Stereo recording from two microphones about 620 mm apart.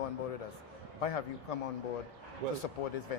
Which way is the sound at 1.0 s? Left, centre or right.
Left.